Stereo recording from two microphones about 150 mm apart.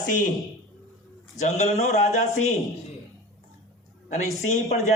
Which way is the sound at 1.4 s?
50° left (ahead or behind).